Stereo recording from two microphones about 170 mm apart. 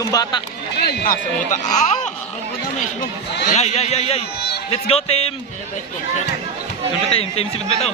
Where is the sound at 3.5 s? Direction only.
40° left (ahead or behind).